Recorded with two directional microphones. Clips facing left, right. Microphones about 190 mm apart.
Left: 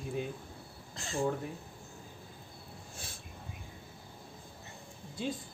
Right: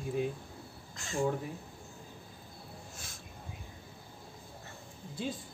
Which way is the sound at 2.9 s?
30° left (ahead or behind).